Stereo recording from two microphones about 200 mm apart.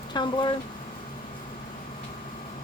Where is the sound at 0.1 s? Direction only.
25° left (ahead or behind).